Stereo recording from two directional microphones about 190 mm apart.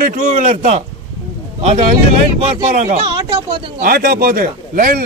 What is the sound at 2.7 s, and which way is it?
Speech, 35° right (ahead or behind).